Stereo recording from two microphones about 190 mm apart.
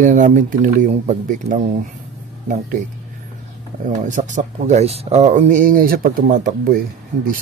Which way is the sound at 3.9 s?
40° right (ahead or behind).